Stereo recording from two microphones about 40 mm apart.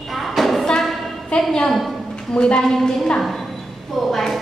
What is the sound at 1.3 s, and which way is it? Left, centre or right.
A woman's voice, left.